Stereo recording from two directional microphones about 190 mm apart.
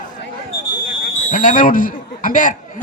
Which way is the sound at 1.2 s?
40° left (ahead or behind).